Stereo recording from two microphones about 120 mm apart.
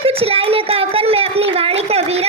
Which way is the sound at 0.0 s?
55° right (ahead or behind).